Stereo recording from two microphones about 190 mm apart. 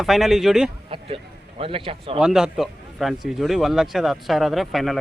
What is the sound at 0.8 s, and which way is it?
Speech, 30° right (ahead or behind).